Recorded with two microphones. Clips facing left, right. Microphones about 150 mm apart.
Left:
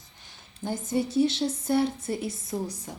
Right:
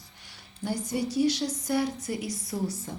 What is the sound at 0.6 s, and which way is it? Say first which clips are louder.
Speech: left 2 dB; 25° left (ahead or behind).